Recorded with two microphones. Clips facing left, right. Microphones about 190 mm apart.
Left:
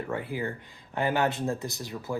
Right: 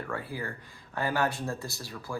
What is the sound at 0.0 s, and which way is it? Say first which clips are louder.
Speech: left 4 dB; 20° left (ahead or behind).